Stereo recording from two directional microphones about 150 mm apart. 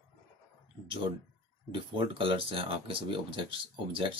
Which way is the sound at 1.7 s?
35° right (ahead or behind).